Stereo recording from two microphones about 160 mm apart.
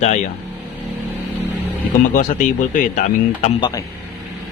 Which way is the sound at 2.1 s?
55° left (ahead or behind).